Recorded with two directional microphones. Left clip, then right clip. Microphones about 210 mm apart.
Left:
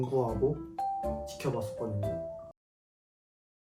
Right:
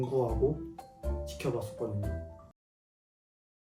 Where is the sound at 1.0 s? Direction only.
Centre (ahead or behind).